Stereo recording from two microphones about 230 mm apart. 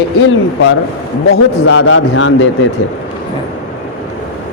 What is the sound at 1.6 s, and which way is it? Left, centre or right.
Speech, left.